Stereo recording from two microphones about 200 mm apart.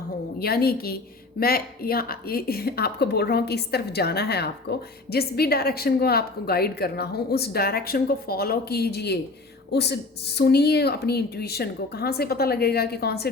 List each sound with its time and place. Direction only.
0.3 s a woman's voice: 50° left (ahead or behind)